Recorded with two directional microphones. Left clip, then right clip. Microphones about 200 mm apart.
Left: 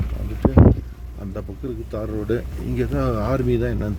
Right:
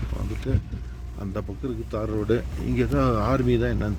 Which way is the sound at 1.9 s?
5° right (ahead or behind).